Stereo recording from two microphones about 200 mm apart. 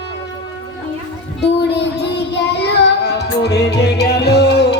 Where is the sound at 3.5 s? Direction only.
55° left (ahead or behind).